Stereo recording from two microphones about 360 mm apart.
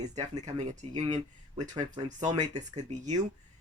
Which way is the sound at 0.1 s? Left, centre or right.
Centre.